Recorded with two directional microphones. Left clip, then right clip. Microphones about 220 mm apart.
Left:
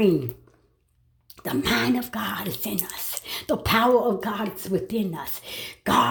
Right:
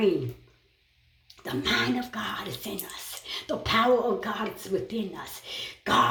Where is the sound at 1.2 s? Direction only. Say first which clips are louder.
Left 3 dB; 55° left (ahead or behind).